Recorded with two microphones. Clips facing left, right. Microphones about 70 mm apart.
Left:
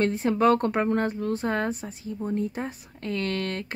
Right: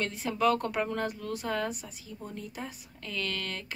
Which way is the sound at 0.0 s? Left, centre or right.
Left.